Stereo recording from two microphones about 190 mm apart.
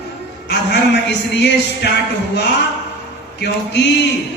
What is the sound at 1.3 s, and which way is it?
Speech, 65° left (ahead or behind).